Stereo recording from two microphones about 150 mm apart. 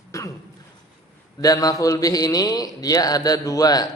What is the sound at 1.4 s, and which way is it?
A man's voice, 25° left (ahead or behind).